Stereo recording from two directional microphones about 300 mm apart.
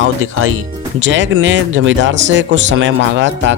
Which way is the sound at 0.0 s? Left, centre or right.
Right.